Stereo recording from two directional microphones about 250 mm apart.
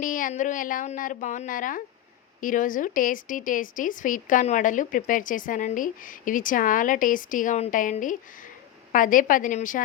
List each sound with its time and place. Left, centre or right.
0.0 s speech: left